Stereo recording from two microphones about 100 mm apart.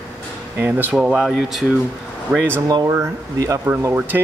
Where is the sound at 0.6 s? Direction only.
15° right (ahead or behind); by 1.6 s centre (ahead or behind).